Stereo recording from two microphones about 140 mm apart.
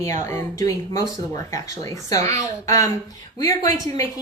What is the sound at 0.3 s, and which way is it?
Speech, 20° left (ahead or behind).